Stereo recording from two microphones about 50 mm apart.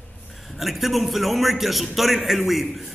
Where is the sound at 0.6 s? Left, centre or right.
Centre.